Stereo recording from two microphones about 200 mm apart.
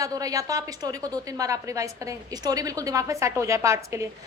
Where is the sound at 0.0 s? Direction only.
15° right (ahead or behind).